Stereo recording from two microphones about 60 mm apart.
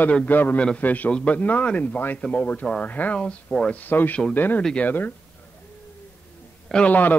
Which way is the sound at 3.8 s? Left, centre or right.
Left.